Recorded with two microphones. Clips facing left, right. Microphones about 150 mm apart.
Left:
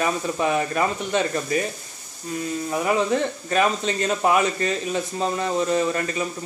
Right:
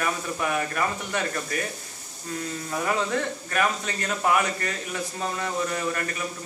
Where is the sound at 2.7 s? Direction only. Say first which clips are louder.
Left 4 dB; 15° left (ahead or behind).